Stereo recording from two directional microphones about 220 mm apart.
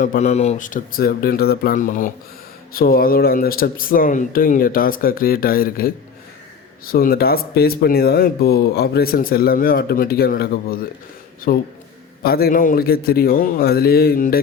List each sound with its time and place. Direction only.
0.0 s speech: 35° left (ahead or behind)